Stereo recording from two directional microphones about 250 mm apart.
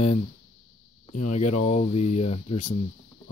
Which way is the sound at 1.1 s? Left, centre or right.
Left.